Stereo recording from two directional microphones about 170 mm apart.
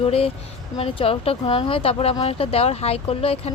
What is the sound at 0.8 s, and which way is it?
Speech, 35° left (ahead or behind).